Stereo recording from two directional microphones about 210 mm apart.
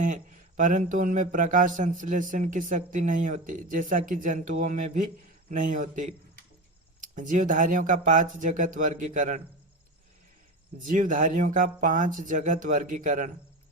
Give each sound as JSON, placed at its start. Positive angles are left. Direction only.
{"t": 0.0, "sound": "speech", "side_deg": -40}
{"t": 10.8, "sound": "speech", "side_deg": -40}